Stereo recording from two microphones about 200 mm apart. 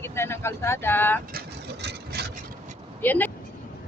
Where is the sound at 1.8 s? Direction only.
55° right (ahead or behind).